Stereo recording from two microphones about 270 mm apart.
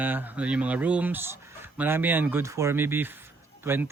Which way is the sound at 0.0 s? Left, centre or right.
Centre.